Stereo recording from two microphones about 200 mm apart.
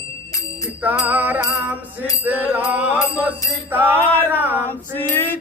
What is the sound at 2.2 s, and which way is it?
Mantra, 10° right (ahead or behind).